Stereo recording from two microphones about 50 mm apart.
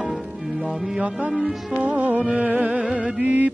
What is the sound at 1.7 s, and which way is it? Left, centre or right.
Music, right.